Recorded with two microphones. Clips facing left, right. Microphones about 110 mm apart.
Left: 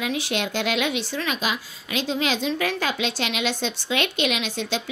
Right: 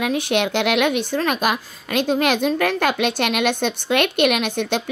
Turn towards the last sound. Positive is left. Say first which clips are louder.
# right 6 dB
turn(degrees=-60)  # may be behind; listen again after turning